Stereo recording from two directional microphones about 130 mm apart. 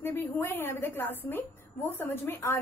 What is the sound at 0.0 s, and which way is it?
A woman's voice, 15° left (ahead or behind).